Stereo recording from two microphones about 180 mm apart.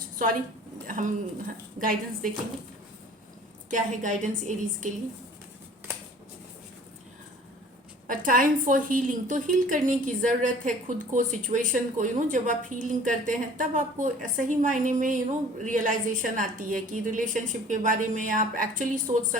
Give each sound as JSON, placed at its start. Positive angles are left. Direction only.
{"t": 0.9, "sound": "speech", "side_deg": -45}
{"t": 3.7, "sound": "speech", "side_deg": -45}
{"t": 8.0, "sound": "speech", "side_deg": -50}